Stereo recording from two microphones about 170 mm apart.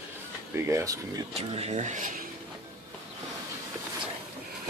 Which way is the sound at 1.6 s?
40° right (ahead or behind).